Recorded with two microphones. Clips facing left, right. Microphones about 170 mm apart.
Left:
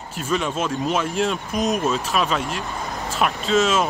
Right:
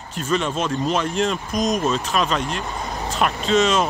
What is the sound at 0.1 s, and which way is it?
Speech, 5° left (ahead or behind).